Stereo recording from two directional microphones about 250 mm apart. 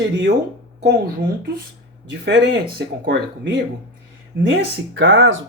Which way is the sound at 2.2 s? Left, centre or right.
Right.